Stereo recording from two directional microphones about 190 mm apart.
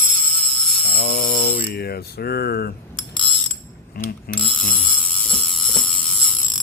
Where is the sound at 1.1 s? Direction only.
50° left (ahead or behind).